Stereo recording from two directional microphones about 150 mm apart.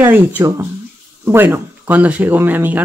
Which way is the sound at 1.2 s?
15° right (ahead or behind).